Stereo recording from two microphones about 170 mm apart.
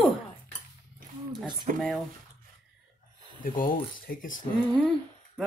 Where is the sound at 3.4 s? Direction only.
50° left (ahead or behind).